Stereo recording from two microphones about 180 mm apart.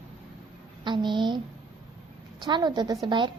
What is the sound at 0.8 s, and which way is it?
Speech, 25° right (ahead or behind).